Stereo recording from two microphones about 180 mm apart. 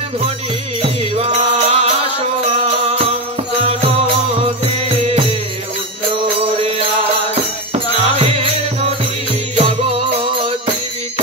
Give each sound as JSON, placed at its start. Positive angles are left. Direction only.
{"t": 1.1, "sound": "music", "side_deg": -35}
{"t": 9.6, "sound": "music", "side_deg": -35}